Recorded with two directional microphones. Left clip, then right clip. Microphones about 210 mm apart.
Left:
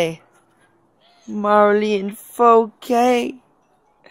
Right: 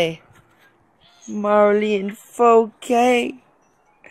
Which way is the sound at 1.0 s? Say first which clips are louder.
Even; 45° left (ahead or behind).